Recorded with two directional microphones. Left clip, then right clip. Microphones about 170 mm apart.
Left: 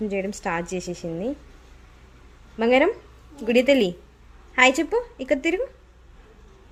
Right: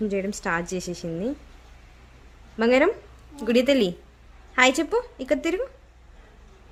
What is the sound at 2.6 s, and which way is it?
A woman's voice, 10° right (ahead or behind).